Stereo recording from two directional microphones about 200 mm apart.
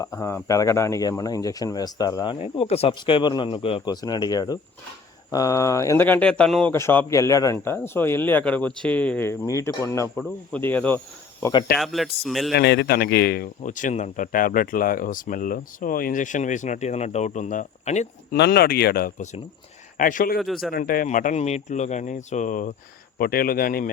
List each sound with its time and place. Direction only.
0.0 s speech: 15° left (ahead or behind)
12.5 s speech: 55° left (ahead or behind)
13.6 s speech: 40° left (ahead or behind)
18.3 s speech: 55° left (ahead or behind)
20.4 s speech: centre (ahead or behind)
20.7 s speech: 45° left (ahead or behind)